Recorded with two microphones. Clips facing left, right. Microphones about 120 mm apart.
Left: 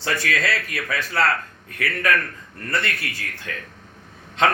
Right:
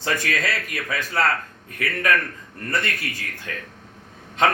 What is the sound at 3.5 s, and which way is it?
Speech, 25° right (ahead or behind).